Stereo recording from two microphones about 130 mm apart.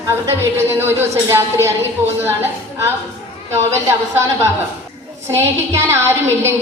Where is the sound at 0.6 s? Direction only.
20° right (ahead or behind).